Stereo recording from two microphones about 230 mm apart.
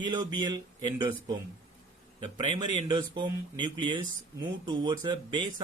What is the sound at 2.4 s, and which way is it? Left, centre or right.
Speech, right.